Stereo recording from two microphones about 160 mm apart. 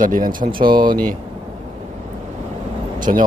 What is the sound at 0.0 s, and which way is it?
Speech, 55° right (ahead or behind).